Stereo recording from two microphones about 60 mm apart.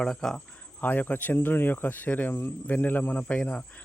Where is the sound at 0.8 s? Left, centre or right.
Left.